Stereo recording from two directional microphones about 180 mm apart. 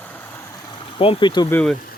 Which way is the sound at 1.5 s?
5° left (ahead or behind).